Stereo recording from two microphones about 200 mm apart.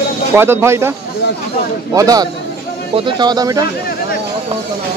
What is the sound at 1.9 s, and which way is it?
Speech, 20° right (ahead or behind).